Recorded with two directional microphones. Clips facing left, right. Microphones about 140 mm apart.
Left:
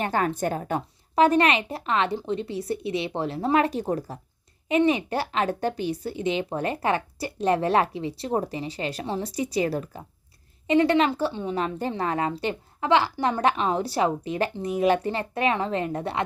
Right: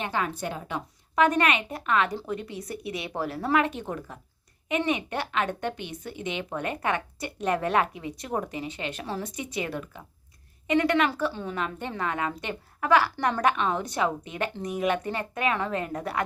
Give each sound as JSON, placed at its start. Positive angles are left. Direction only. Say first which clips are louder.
{"t": 0.0, "sound": "a woman's voice", "louder": "left 5 dB", "side_deg": 45}
{"t": 1.1, "sound": "a woman's voice", "louder": "left 3 dB", "side_deg": 30}
{"t": 3.6, "sound": "a woman's voice", "louder": "left 4 dB", "side_deg": 35}